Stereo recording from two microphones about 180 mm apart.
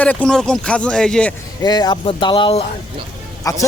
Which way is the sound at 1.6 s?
25° left (ahead or behind).